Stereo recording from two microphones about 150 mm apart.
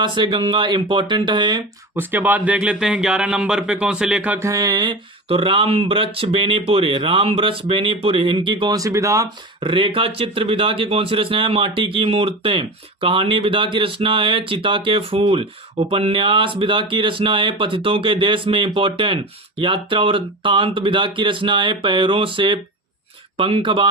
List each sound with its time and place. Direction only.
0.0 s speech: 30° right (ahead or behind)
2.0 s speech: 15° right (ahead or behind)
9.6 s speech: 35° right (ahead or behind)